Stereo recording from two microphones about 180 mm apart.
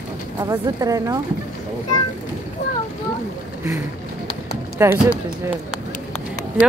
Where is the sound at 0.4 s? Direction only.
20° right (ahead or behind).